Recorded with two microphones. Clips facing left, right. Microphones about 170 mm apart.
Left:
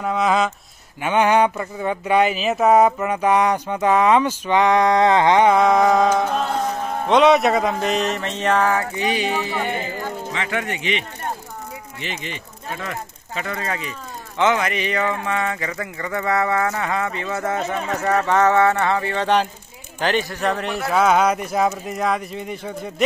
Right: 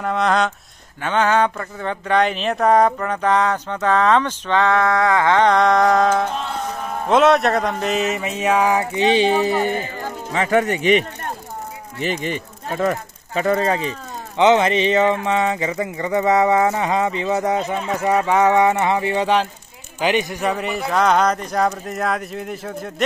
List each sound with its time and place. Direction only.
0.0 s speech: 5° left (ahead or behind)
1.0 s speech: 10° left (ahead or behind)
5.5 s speech: 5° left (ahead or behind)
7.1 s a sound: centre (ahead or behind); by 9.7 s 40° right (ahead or behind)
10.3 s speech: 40° right (ahead or behind); by 19.2 s 15° right (ahead or behind)
20.0 s a sound: 15° right (ahead or behind)
20.4 s speech: 5° right (ahead or behind)